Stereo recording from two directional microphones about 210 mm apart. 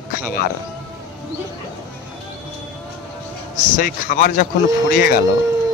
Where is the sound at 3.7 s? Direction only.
40° left (ahead or behind).